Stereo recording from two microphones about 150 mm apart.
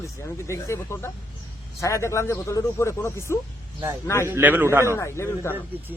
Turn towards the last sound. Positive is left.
turn(degrees=20)  # may be behind; listen again after turning